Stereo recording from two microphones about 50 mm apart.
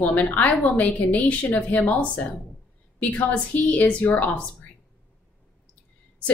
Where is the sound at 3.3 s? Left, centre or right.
Left.